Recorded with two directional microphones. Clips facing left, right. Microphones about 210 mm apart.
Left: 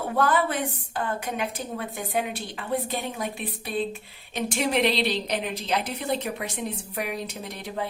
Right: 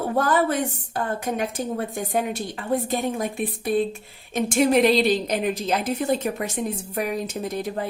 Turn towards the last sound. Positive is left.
turn(degrees=-45)  # may be behind; listen again after turning